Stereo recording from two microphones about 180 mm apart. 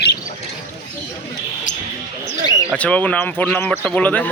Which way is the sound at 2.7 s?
5° left (ahead or behind).